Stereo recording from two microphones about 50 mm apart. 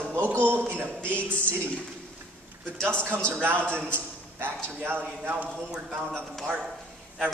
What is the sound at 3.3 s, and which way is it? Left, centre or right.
Speech, right.